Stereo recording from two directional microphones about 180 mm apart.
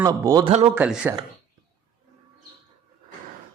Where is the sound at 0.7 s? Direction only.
5° right (ahead or behind).